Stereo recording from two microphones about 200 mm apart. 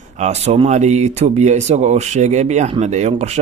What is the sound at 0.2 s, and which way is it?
Speech, 35° right (ahead or behind).